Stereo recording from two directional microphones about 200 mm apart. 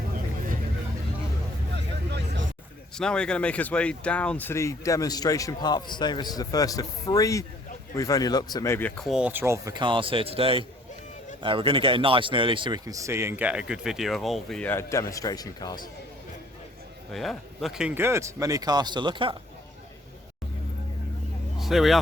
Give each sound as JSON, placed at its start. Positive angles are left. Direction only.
{"t": 1.7, "sound": "vehicle", "side_deg": -55}
{"t": 2.9, "sound": "speech", "side_deg": 5}
{"t": 17.1, "sound": "speech", "side_deg": 0}
{"t": 21.6, "sound": "speech", "side_deg": 0}